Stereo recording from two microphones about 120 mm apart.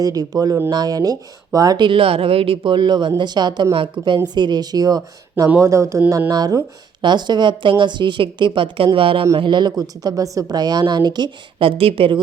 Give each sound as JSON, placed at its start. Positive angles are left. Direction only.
{"t": 0.0, "sound": "a woman's voice", "side_deg": -30}